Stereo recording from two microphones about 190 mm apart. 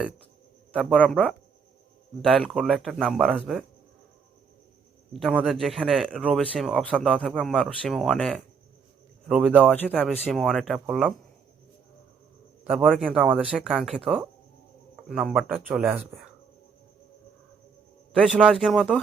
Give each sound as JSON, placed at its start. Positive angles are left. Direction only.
{"t": 0.7, "sound": "speech", "side_deg": 0}
{"t": 5.1, "sound": "speech", "side_deg": -5}
{"t": 12.6, "sound": "a man's voice", "side_deg": -10}
{"t": 18.3, "sound": "speech", "side_deg": -5}